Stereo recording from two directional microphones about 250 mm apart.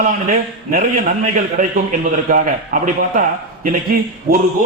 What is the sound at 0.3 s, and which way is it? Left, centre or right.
A man's voice, right.